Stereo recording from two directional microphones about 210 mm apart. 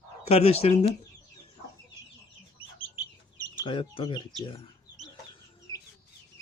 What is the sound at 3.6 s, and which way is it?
Speech, 25° left (ahead or behind).